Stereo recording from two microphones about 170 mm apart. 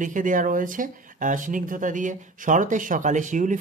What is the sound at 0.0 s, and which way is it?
Speech, 50° right (ahead or behind).